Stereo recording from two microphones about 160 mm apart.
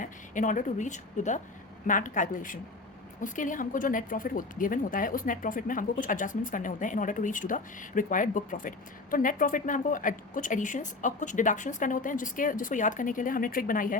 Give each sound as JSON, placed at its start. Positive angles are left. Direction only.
{"t": 0.0, "sound": "a woman's voice", "side_deg": 55}